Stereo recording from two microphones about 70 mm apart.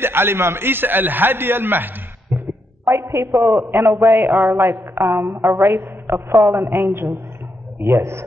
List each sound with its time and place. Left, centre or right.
0.0 s a man's voice: right
2.3 s a sound: right
3.4 s a man's voice: right